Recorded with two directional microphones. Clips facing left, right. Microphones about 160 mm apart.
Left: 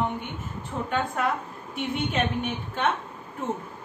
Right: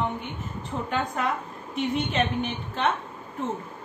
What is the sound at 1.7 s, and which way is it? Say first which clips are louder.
A woman's voice: right 2 dB; 5° left (ahead or behind).